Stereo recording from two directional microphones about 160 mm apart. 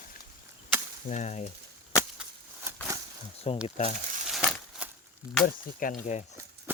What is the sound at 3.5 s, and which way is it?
Speech, 35° left (ahead or behind).